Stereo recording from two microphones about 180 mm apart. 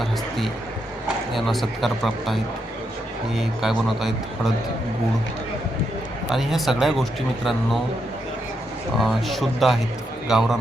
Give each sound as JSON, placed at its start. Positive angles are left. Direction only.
{"t": 0.0, "sound": "speech", "side_deg": 0}
{"t": 6.3, "sound": "speech", "side_deg": 0}
{"t": 9.0, "sound": "speech", "side_deg": 0}